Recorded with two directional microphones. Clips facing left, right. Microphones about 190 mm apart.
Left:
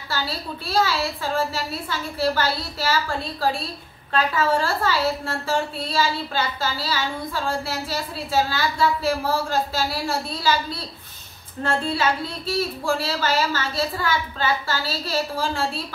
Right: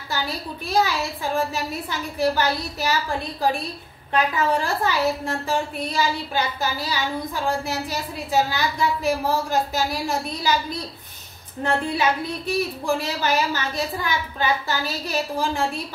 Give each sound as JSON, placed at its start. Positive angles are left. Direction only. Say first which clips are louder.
{"t": 0.7, "sound": "a woman's voice", "louder": "even", "side_deg": -15}